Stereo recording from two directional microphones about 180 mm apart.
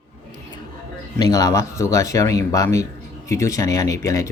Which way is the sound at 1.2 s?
20° left (ahead or behind).